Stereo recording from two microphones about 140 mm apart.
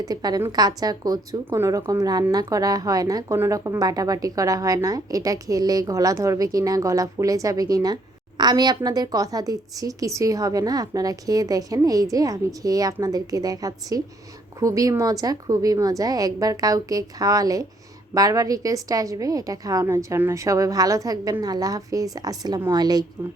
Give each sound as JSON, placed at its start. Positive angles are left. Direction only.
{"t": 0.0, "sound": "a woman's voice", "side_deg": -30}